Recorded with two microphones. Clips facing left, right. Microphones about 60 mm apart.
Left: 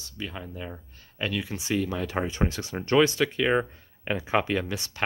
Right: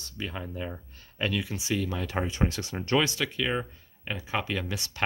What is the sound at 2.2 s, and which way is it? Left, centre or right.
Speech, left.